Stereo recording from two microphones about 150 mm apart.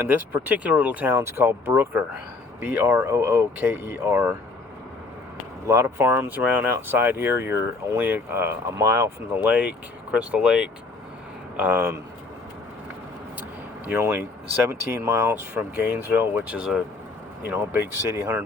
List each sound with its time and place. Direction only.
0.1 s speech: 10° right (ahead or behind)
5.6 s speech: 20° right (ahead or behind)
13.8 s speech: 15° right (ahead or behind)